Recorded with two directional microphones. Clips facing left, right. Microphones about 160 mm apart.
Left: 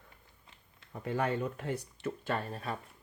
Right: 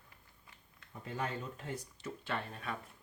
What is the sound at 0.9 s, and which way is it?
Speech, 65° left (ahead or behind).